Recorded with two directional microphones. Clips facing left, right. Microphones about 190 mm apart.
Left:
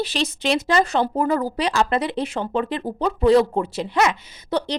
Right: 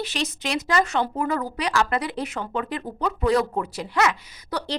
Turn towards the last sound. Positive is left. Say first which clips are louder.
# left 6 dB
turn(degrees=20)  # may be behind; listen again after turning